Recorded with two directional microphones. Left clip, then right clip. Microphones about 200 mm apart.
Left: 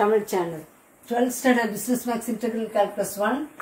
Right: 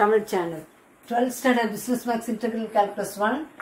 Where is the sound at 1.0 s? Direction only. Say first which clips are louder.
Left 1 dB; 15° left (ahead or behind).